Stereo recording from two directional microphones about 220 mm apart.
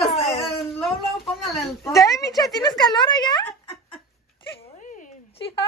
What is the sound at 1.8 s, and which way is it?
Speech, 15° left (ahead or behind).